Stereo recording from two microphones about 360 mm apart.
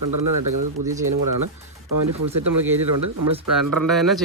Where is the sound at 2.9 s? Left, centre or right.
Right.